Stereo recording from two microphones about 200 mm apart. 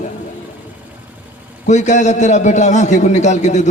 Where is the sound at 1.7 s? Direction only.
35° left (ahead or behind).